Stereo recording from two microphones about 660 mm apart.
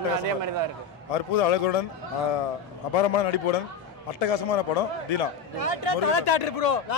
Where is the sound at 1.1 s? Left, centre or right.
Left.